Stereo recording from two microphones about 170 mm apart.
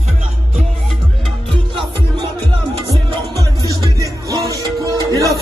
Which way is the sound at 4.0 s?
20° right (ahead or behind).